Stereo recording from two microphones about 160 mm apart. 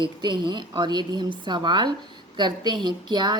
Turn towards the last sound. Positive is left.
turn(degrees=-25)  # may be behind; listen again after turning